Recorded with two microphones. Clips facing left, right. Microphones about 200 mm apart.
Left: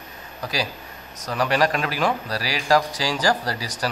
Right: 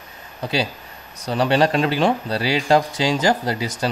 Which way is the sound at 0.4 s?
25° right (ahead or behind).